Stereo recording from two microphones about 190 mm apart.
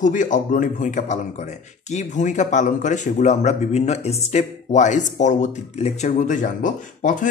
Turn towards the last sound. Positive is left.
turn(degrees=40)  # may be behind; listen again after turning